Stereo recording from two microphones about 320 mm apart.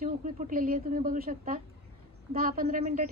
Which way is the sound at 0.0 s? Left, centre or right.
Right.